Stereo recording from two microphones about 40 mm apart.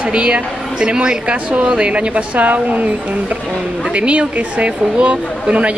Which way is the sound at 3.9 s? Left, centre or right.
Right.